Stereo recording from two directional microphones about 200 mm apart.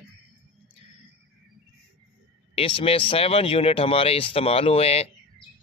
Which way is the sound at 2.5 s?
30° left (ahead or behind).